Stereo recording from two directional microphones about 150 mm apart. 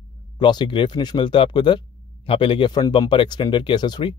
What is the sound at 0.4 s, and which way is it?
Speech, 30° left (ahead or behind).